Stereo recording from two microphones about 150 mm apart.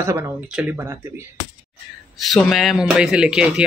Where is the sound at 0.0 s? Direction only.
15° right (ahead or behind).